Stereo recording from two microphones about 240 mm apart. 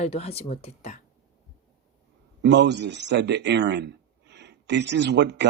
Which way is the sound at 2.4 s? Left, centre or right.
Right.